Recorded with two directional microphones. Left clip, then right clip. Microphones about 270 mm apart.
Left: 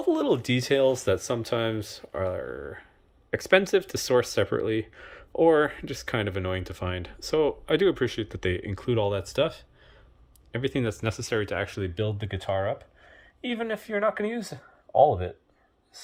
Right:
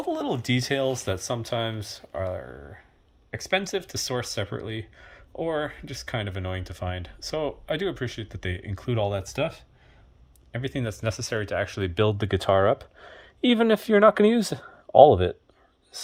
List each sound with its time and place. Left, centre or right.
0.1 s speech: centre
11.9 s speech: centre